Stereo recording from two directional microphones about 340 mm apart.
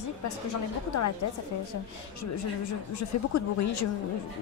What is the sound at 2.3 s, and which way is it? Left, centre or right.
Speech, left.